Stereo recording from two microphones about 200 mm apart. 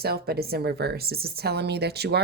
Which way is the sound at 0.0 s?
50° right (ahead or behind).